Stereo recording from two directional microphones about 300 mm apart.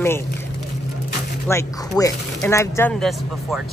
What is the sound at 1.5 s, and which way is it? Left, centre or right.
Speech, centre.